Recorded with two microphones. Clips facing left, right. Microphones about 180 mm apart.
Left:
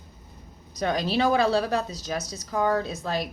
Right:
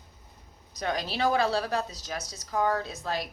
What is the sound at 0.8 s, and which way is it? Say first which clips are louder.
A woman's voice: left 5 dB; 25° left (ahead or behind).